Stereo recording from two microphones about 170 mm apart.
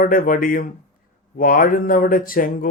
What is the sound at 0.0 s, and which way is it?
Speech, 55° left (ahead or behind).